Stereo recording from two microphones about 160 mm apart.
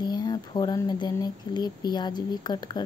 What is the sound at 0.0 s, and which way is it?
Speech, 25° left (ahead or behind).